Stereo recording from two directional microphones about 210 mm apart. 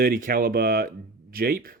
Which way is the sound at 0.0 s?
40° right (ahead or behind).